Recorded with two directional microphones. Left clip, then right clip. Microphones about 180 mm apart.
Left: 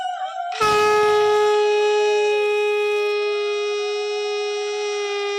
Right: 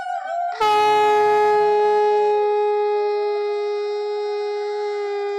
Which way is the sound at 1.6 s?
35° right (ahead or behind).